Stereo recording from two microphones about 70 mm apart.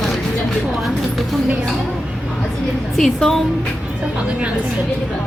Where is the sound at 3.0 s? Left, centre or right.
Centre.